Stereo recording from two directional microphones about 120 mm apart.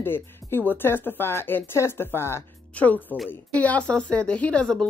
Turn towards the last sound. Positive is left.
turn(degrees=5)  # may be behind; listen again after turning